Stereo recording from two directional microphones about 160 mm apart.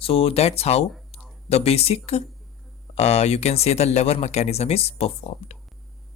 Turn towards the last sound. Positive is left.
turn(degrees=40)  # may be behind; listen again after turning